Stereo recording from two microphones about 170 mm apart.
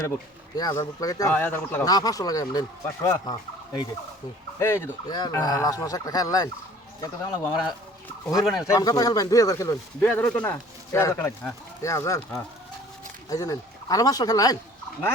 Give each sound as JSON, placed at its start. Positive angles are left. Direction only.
{"t": 0.5, "sound": "speech", "side_deg": 20}
{"t": 4.6, "sound": "speech", "side_deg": 15}